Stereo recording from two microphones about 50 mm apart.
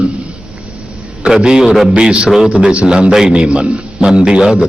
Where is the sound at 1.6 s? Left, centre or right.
Centre.